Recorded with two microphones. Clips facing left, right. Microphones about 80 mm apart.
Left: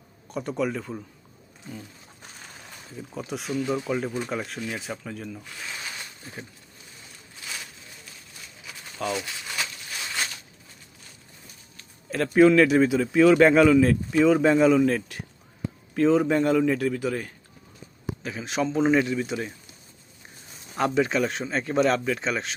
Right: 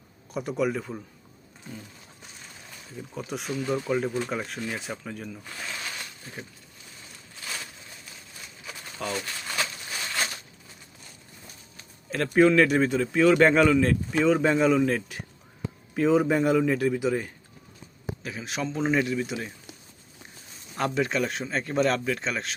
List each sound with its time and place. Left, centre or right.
0.3 s a man's voice: centre
3.2 s a man's voice: centre
8.6 s crumpling: centre
12.1 s a man's voice: centre
16.9 s speech: centre
18.2 s a man's voice: centre
20.7 s a man's voice: centre